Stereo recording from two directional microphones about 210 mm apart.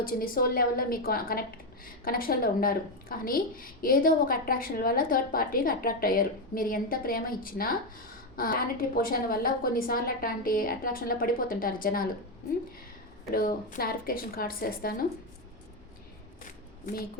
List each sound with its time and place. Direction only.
0.0 s a woman's voice: 45° left (ahead or behind)
13.3 s a woman's voice: 40° left (ahead or behind)
16.4 s shuffling cards: 45° left (ahead or behind)